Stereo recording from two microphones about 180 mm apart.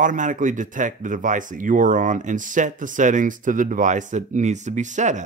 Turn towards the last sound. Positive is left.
turn(degrees=-40)  # may be behind; listen again after turning